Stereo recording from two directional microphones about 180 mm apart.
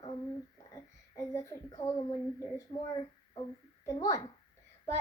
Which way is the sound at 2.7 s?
30° left (ahead or behind).